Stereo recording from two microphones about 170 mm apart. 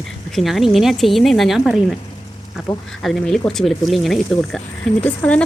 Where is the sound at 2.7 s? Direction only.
25° left (ahead or behind).